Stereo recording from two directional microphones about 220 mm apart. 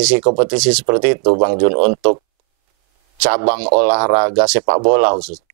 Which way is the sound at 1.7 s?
40° right (ahead or behind).